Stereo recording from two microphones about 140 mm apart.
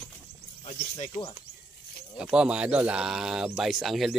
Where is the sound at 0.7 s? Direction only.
45° left (ahead or behind).